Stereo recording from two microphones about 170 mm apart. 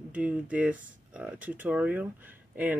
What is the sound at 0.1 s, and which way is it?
Speech, 5° right (ahead or behind).